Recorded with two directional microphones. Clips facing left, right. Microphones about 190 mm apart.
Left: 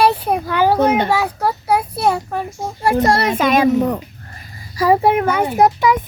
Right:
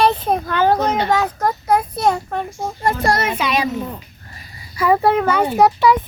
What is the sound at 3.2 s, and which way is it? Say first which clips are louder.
Speech: left 5 dB; 45° left (ahead or behind).